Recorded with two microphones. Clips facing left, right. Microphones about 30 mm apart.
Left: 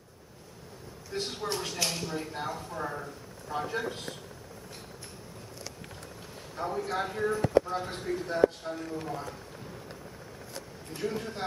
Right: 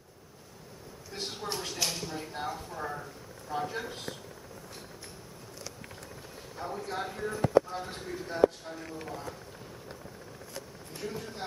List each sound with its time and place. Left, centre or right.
1.1 s speech: centre
6.5 s speech: centre
11.0 s a man's voice: centre